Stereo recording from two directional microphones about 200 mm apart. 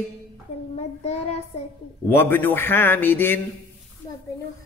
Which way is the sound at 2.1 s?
10° left (ahead or behind).